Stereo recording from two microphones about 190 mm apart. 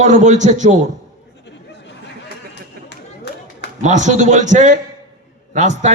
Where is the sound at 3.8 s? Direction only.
40° right (ahead or behind).